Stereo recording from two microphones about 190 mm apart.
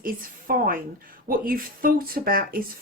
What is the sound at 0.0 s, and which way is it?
A woman's voice, 50° right (ahead or behind).